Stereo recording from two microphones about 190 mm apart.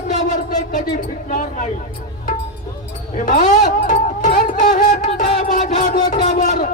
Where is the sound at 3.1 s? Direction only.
40° left (ahead or behind).